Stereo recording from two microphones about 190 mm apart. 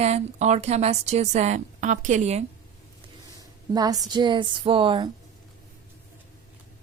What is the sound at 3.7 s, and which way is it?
A woman's voice, 20° right (ahead or behind).